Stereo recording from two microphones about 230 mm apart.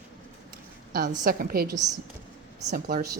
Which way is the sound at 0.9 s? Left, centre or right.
Right.